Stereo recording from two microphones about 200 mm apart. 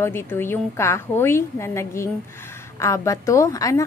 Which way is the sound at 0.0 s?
10° left (ahead or behind).